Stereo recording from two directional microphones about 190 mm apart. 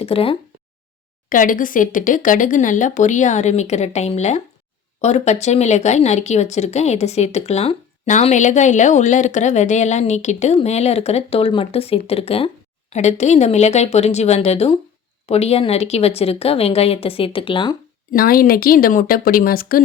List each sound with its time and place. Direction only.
0.0 s speech: 30° left (ahead or behind)
1.3 s speech: 45° left (ahead or behind); by 17.7 s 25° left (ahead or behind)
18.1 s a woman's voice: 50° left (ahead or behind)